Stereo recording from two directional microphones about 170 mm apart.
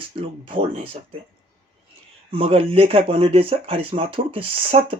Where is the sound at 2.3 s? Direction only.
35° right (ahead or behind).